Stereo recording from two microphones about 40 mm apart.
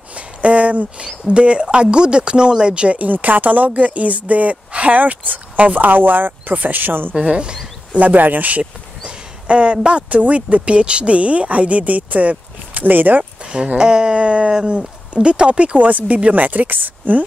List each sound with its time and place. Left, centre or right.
0.1 s a sound: right
1.0 s speech: right
3.0 s a woman's voice: right
7.2 s speech: right
8.0 s speech: right
9.0 s speech: right
13.2 s a sound: right
13.7 s speech: right
15.9 s a woman's voice: right